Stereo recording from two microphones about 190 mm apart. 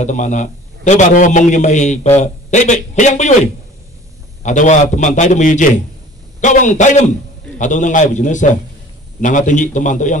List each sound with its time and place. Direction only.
0.0 s a man's voice: 40° left (ahead or behind)
4.4 s a man's voice: 40° left (ahead or behind)